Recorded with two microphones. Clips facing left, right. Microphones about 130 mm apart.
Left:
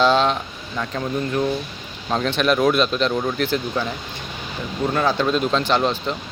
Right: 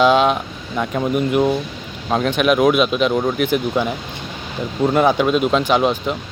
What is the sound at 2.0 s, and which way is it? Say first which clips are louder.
Speech: right 3 dB; 5° right (ahead or behind).